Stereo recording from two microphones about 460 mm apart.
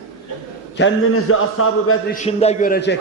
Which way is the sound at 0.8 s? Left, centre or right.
Left.